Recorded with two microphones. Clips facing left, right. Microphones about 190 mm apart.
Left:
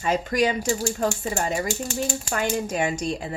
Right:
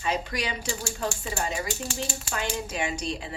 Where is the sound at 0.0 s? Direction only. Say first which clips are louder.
Left 7 dB; 45° left (ahead or behind).